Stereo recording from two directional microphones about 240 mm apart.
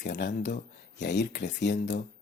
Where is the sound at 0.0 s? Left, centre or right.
Left.